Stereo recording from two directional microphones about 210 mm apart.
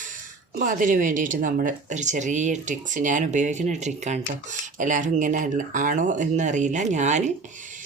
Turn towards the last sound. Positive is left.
turn(degrees=-35)  # may be behind; listen again after turning